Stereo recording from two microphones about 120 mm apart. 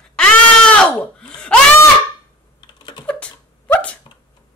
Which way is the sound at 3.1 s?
10° left (ahead or behind).